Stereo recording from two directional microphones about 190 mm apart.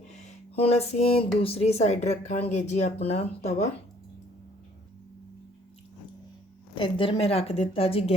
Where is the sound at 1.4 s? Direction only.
30° left (ahead or behind).